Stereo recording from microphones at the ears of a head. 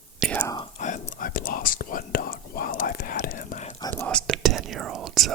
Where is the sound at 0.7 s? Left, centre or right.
Left.